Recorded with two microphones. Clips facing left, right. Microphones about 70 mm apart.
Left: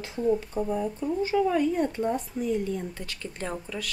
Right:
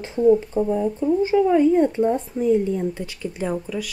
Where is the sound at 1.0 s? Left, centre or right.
Right.